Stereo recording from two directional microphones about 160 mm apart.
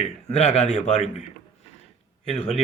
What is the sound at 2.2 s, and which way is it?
Speech, 40° left (ahead or behind).